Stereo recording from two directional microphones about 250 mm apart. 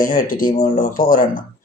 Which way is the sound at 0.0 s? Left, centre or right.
Left.